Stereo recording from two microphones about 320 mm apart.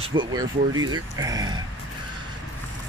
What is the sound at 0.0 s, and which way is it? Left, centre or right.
Speech, centre.